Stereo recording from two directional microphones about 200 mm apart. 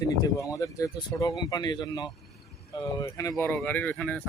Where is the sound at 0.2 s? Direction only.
15° left (ahead or behind).